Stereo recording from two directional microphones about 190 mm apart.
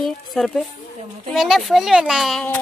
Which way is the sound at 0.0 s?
Centre (ahead or behind).